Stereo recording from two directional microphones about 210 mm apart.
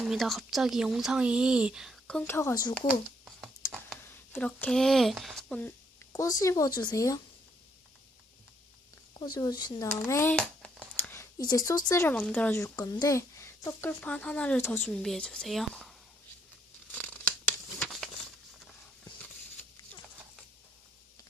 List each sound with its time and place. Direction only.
0.0 s speech: centre (ahead or behind); by 2.7 s 15° left (ahead or behind)
2.8 s a sound: 5° right (ahead or behind)
3.7 s speech: 5° left (ahead or behind)
9.1 s speech: 20° left (ahead or behind)
10.0 s a sound: 10° left (ahead or behind)
11.9 s speech: 10° left (ahead or behind)
16.9 s scissors: 5° left (ahead or behind)
17.7 s crumpling: centre (ahead or behind)